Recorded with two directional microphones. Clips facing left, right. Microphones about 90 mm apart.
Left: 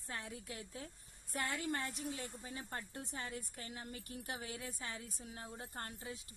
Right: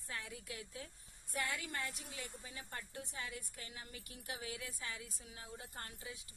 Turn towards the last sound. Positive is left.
turn(degrees=40)  # may be behind; listen again after turning